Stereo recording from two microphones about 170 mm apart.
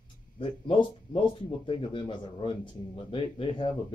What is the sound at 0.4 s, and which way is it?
Speech, 30° left (ahead or behind).